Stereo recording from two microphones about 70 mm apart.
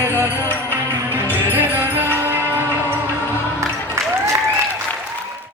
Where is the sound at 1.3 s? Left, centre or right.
Left.